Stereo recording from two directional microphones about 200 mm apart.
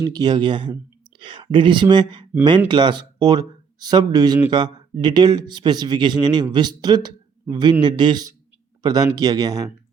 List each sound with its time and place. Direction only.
0.0 s speech: 20° right (ahead or behind)